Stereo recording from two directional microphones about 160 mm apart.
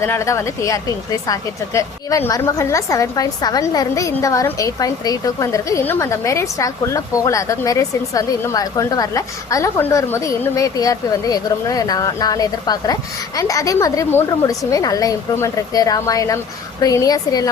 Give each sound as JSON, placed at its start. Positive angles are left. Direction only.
{"t": 0.0, "sound": "a woman's voice", "side_deg": 15}